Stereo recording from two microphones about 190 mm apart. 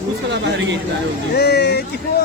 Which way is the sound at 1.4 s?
60° left (ahead or behind).